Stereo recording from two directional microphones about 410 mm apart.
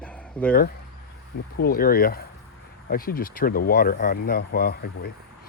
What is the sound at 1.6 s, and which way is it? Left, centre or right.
Speech, left.